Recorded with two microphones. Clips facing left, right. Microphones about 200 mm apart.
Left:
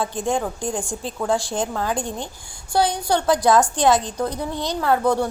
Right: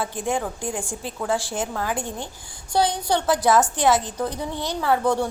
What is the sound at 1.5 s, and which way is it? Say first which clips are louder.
Speech: left 3 dB; 5° right (ahead or behind).